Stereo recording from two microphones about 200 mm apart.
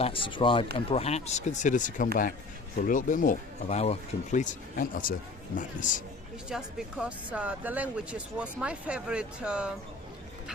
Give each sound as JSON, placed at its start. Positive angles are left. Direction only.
{"t": 0.0, "sound": "speech", "side_deg": 25}
{"t": 6.5, "sound": "speech", "side_deg": -5}